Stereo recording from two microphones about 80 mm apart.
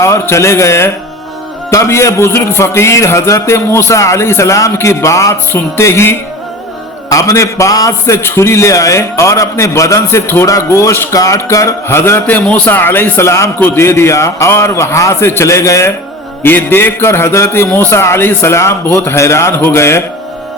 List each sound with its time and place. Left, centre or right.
0.0 s a man's voice: left
5.5 s a man's voice: left
7.1 s a man's voice: left
12.2 s a man's voice: centre; by 15.9 s left
16.4 s a man's voice: left